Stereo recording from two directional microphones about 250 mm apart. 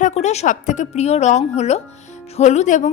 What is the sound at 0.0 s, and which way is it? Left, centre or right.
A woman's voice, left.